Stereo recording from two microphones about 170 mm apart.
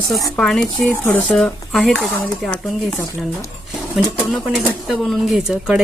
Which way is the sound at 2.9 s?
15° left (ahead or behind).